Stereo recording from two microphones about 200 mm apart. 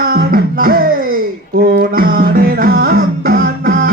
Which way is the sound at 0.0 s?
45° right (ahead or behind).